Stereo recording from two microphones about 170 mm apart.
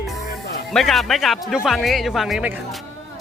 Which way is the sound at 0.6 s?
Centre (ahead or behind).